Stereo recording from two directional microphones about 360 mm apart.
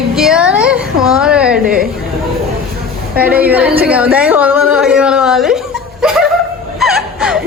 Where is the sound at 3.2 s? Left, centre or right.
Centre.